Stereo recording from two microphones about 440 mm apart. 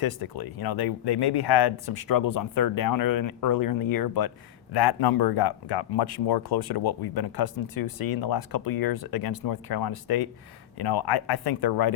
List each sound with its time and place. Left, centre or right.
0.0 s speech: left